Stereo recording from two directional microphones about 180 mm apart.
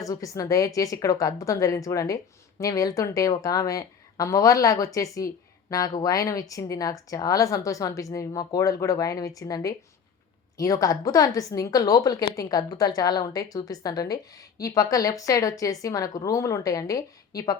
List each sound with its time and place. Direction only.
0.0 s speech: 20° left (ahead or behind)